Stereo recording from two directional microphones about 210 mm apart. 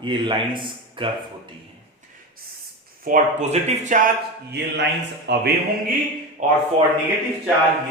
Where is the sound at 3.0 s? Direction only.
35° right (ahead or behind).